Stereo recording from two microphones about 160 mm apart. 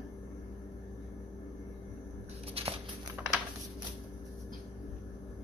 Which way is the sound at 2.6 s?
35° right (ahead or behind).